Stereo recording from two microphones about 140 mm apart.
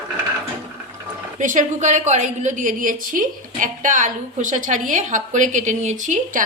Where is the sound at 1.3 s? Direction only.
65° right (ahead or behind).